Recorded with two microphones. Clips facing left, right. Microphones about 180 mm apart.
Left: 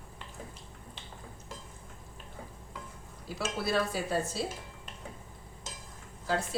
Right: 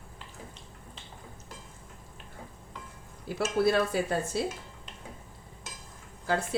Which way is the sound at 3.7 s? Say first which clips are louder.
Right 1 dB; 60° right (ahead or behind).